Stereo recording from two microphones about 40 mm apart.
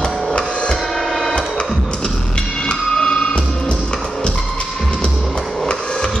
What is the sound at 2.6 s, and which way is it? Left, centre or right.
Music, left.